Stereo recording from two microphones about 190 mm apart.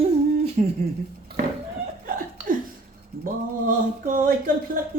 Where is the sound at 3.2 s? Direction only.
45° right (ahead or behind).